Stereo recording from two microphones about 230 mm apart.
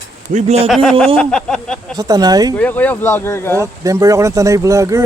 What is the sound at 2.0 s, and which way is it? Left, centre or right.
Speech, centre.